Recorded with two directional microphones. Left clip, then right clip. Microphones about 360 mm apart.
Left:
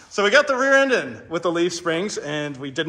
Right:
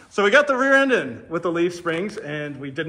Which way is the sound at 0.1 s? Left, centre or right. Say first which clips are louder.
Even; centre.